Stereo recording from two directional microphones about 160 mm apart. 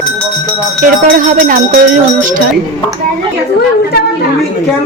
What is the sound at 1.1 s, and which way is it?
Speech, 55° right (ahead or behind).